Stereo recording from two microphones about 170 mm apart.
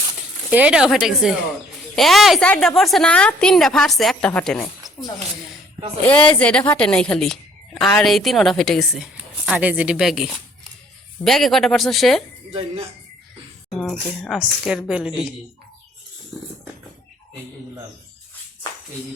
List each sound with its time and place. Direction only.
0.5 s a woman's voice: 5° right (ahead or behind)
6.0 s a woman's voice: 10° left (ahead or behind)
12.5 s speech: 35° right (ahead or behind)
13.9 s a woman's voice: 5° right (ahead or behind)